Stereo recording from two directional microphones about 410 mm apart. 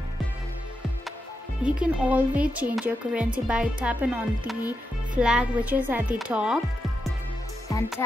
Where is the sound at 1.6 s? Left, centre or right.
Centre.